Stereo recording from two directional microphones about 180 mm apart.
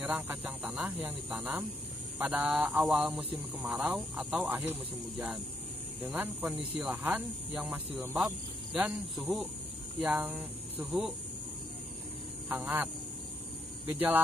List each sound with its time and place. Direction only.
0.0 s speech: 10° right (ahead or behind)
2.7 s speech: 20° right (ahead or behind)
3.0 s speech: 5° right (ahead or behind)
6.0 s speech: 10° right (ahead or behind)
12.4 s speech: 10° right (ahead or behind)